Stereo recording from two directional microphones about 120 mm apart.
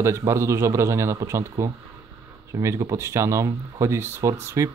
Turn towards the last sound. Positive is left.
turn(degrees=-25)  # may be behind; listen again after turning